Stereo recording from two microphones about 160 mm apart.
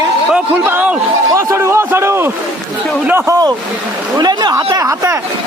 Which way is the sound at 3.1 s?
20° right (ahead or behind).